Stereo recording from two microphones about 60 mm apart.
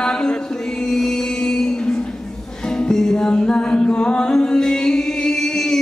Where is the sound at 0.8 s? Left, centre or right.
Centre.